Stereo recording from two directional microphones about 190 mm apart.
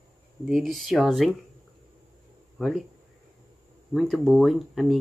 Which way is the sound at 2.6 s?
Centre (ahead or behind).